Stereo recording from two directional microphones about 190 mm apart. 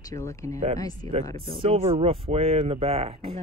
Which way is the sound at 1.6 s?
30° right (ahead or behind).